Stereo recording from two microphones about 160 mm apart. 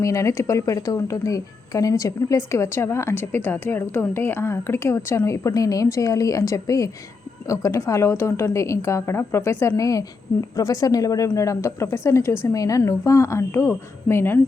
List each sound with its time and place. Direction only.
0.0 s a woman's voice: 20° left (ahead or behind)